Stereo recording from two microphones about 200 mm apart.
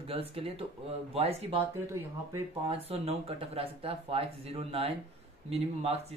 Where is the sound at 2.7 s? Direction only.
30° right (ahead or behind).